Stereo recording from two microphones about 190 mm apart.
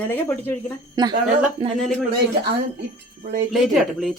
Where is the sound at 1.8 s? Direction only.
Centre (ahead or behind).